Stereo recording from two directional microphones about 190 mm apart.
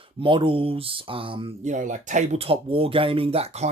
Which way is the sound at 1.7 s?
40° right (ahead or behind).